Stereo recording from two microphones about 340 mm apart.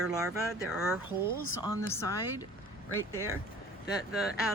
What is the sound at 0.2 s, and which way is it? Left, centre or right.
Speech, centre.